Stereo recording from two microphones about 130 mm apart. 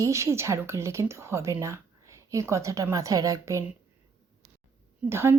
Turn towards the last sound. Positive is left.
turn(degrees=-20)  # may be behind; listen again after turning